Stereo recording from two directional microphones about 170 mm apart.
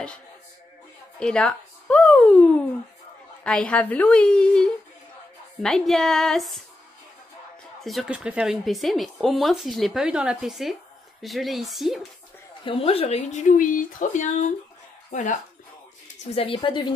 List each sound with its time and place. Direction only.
1.2 s a woman's voice: 5° left (ahead or behind)
7.8 s speech: centre (ahead or behind)
12.6 s speech: 35° left (ahead or behind)
16.3 s speech: 30° left (ahead or behind)